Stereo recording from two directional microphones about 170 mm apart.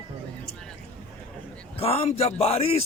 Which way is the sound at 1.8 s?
35° left (ahead or behind).